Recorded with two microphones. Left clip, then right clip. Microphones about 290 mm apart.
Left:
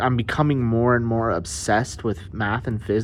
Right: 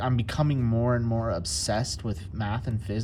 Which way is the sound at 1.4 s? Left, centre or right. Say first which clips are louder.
Even; left.